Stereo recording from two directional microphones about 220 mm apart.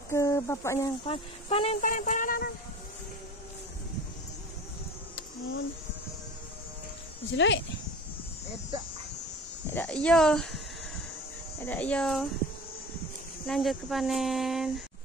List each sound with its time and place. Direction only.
0.1 s cricket: 10° left (ahead or behind)
1.0 s speech: 25° left (ahead or behind)
7.3 s speech: 55° left (ahead or behind)
9.7 s speech: 5° left (ahead or behind)
11.6 s speech: 10° left (ahead or behind)
13.5 s speech: centre (ahead or behind)